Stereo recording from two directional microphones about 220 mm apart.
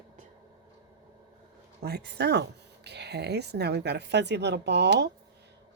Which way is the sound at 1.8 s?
45° right (ahead or behind).